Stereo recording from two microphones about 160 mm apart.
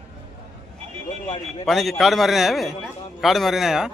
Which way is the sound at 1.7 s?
Centre (ahead or behind).